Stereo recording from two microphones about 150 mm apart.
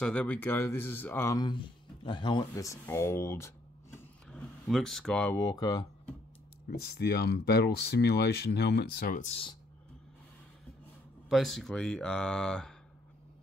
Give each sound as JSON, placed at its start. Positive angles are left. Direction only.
{"t": 0.0, "sound": "speech", "side_deg": 10}
{"t": 1.3, "sound": "speech", "side_deg": 30}
{"t": 4.3, "sound": "speech", "side_deg": 0}
{"t": 5.4, "sound": "speech", "side_deg": 25}
{"t": 6.7, "sound": "speech", "side_deg": 90}
{"t": 9.2, "sound": "speech", "side_deg": 45}
{"t": 11.2, "sound": "speech", "side_deg": 0}